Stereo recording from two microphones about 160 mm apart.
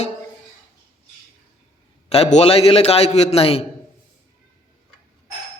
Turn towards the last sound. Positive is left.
turn(degrees=40)  # may be behind; listen again after turning